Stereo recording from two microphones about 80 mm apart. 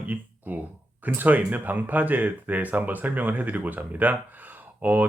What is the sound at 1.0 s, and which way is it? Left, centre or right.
Speech, right.